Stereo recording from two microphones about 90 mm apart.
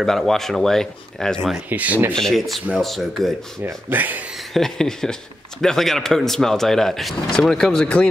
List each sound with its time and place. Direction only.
0.0 s speech: 5° left (ahead or behind)
1.7 s speech: 20° right (ahead or behind)
2.1 s speech: centre (ahead or behind)
3.6 s speech: 20° right (ahead or behind)
4.6 s speech: 5° left (ahead or behind)